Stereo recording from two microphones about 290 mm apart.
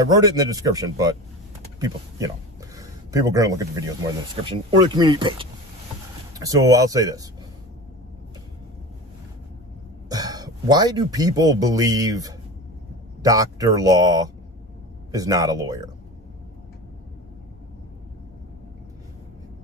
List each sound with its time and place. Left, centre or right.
0.0 s a man's voice: centre
10.0 s speech: centre